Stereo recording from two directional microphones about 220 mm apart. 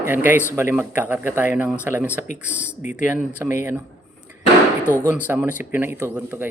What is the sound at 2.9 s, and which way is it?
Speech, 5° right (ahead or behind).